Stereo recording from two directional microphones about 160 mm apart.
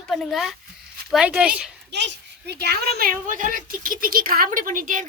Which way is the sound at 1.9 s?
90° right.